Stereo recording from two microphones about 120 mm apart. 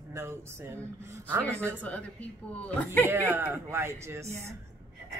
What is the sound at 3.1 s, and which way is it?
Speech, 15° right (ahead or behind).